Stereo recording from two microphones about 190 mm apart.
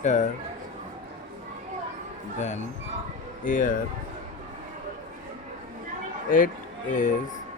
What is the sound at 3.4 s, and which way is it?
Speech, 45° left (ahead or behind).